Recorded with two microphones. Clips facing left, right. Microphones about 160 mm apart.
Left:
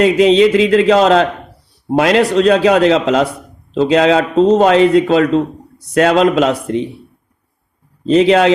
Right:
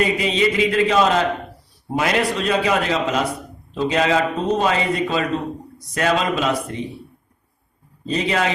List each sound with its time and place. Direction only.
0.0 s a man's voice: 90° left
8.0 s a man's voice: 90° left